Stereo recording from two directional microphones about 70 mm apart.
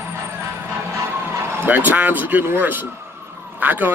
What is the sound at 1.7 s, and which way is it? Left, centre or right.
A man's voice, right.